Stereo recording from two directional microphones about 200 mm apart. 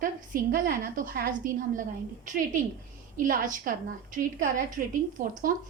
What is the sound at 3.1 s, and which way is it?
A woman's voice, 45° right (ahead or behind).